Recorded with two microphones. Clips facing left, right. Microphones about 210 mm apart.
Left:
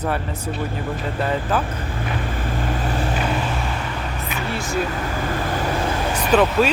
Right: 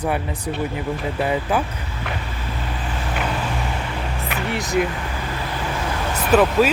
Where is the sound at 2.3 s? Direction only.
50° left (ahead or behind).